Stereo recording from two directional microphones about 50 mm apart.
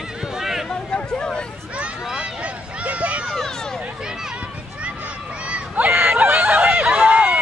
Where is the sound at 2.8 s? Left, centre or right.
Right.